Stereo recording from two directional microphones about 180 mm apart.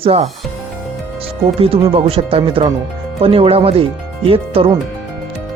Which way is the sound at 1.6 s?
30° right (ahead or behind).